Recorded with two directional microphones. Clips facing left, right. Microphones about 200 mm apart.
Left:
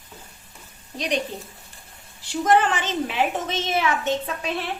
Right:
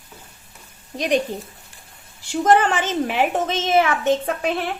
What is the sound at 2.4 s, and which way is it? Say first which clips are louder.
A woman's voice: right 3 dB; 45° right (ahead or behind).